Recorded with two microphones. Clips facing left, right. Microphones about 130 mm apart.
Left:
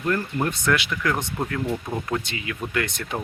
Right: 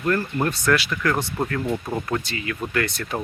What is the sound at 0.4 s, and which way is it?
Speech, 20° left (ahead or behind).